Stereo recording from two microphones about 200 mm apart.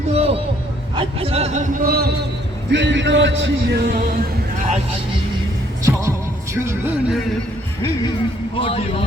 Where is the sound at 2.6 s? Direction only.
65° right (ahead or behind).